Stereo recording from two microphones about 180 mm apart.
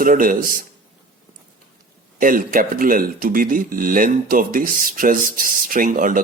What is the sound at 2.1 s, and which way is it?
Speech, 50° right (ahead or behind).